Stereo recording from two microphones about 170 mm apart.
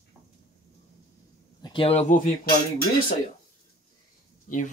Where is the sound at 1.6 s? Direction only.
30° left (ahead or behind); by 2.5 s 50° left (ahead or behind).